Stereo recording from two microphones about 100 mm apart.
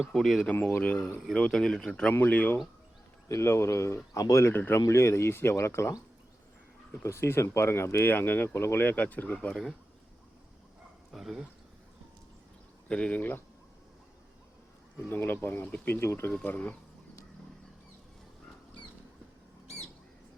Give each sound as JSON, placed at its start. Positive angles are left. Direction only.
{"t": 0.1, "sound": "speech", "side_deg": 0}
{"t": 0.5, "sound": "a man's voice", "side_deg": 20}
{"t": 3.2, "sound": "speech", "side_deg": 30}
{"t": 7.0, "sound": "speech", "side_deg": 25}
{"t": 9.5, "sound": "speech", "side_deg": 0}
{"t": 11.1, "sound": "speech", "side_deg": -5}
{"t": 12.9, "sound": "a man's voice", "side_deg": 15}
{"t": 15.1, "sound": "a man's voice", "side_deg": 20}